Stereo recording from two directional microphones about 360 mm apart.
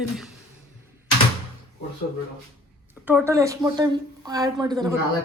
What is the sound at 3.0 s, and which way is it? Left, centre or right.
A woman's voice, centre.